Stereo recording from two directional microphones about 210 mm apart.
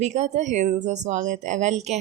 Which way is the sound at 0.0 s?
35° right (ahead or behind).